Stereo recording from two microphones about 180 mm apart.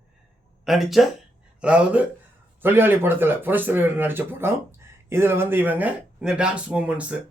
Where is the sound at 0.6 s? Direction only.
Centre (ahead or behind).